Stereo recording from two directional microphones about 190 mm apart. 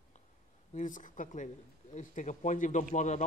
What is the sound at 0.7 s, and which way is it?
A man's voice, 45° left (ahead or behind).